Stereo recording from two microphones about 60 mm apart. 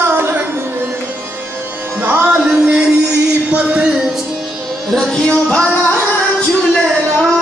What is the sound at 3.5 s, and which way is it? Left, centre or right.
Music, right.